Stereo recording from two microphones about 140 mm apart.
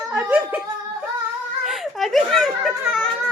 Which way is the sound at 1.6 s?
Centre (ahead or behind).